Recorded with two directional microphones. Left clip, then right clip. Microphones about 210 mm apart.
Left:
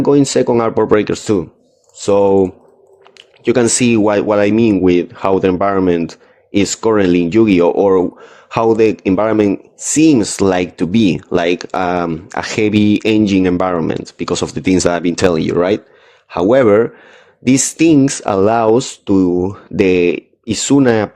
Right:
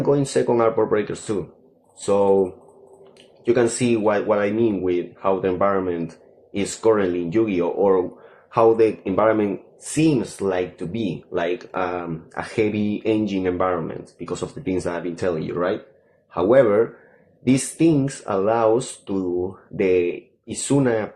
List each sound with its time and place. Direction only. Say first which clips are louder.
0.0 s speech: left 8 dB; 40° left (ahead or behind)